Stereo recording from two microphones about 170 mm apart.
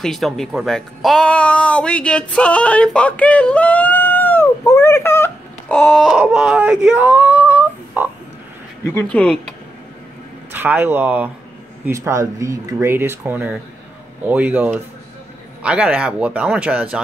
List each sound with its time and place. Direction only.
0.0 s speech: centre (ahead or behind)
5.8 s speech: centre (ahead or behind)
8.9 s speech: 5° left (ahead or behind)
10.5 s speech: 10° right (ahead or behind)